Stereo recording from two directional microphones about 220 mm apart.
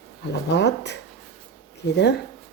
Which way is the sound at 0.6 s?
50° left (ahead or behind).